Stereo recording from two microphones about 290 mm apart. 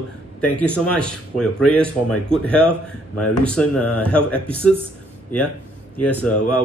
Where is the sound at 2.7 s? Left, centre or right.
Left.